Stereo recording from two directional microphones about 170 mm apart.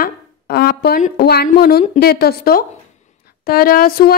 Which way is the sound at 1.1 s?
65° left (ahead or behind).